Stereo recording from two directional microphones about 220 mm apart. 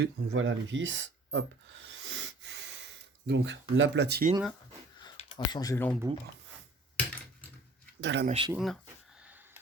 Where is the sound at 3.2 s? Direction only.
55° right (ahead or behind).